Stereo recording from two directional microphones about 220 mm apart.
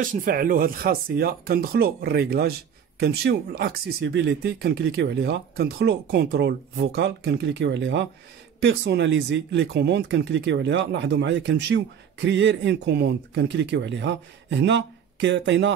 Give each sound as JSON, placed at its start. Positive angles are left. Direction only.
{"t": 0.0, "sound": "speech", "side_deg": -40}